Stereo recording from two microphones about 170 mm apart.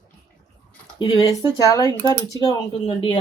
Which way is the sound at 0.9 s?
25° left (ahead or behind).